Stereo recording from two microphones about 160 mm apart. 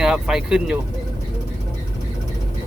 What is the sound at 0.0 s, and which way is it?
Speech, 5° right (ahead or behind).